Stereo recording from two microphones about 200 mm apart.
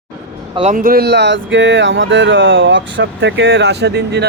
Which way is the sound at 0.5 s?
35° right (ahead or behind).